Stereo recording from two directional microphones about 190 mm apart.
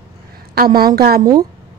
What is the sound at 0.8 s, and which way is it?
Speech, 55° right (ahead or behind).